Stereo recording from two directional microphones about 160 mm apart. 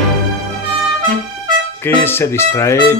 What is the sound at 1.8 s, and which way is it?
A man's voice, 15° left (ahead or behind).